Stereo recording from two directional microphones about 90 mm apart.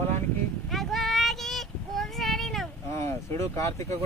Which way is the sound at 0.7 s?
Centre (ahead or behind).